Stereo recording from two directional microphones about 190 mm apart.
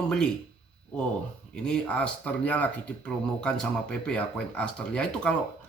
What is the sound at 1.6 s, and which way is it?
Speech, 5° left (ahead or behind).